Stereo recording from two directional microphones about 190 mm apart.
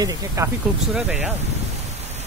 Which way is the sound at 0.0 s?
20° right (ahead or behind).